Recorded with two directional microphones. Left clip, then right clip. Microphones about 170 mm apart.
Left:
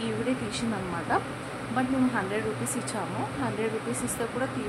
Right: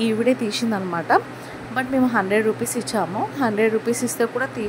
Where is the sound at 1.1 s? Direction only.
40° right (ahead or behind).